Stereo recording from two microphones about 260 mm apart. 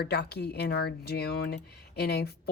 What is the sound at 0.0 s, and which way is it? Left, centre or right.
Speech, left.